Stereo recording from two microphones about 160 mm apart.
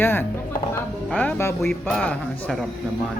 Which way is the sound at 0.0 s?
15° left (ahead or behind).